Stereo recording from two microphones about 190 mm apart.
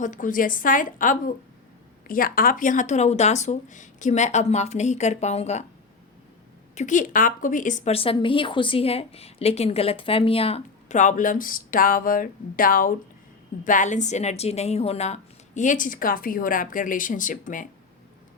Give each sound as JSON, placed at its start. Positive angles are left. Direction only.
{"t": 0.0, "sound": "a woman's voice", "side_deg": 45}
{"t": 6.7, "sound": "a woman's voice", "side_deg": 40}